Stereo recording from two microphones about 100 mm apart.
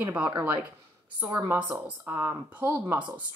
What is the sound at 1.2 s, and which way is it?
Speech, 25° right (ahead or behind).